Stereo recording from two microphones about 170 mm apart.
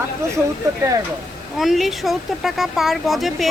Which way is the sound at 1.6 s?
Centre (ahead or behind).